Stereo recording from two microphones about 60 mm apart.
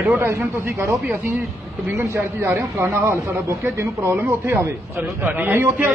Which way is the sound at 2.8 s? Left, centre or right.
Right.